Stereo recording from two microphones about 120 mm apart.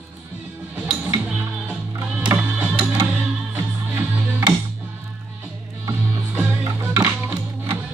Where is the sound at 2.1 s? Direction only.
10° right (ahead or behind).